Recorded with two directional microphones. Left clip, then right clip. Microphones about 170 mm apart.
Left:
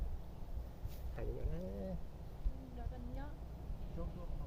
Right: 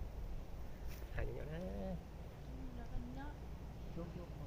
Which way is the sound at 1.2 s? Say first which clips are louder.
Even; 55° left (ahead or behind).